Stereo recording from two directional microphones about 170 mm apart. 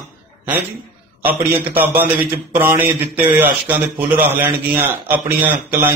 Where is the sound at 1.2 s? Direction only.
10° right (ahead or behind).